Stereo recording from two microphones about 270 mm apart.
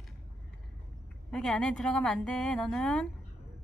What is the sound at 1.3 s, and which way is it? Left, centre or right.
A woman's voice, centre.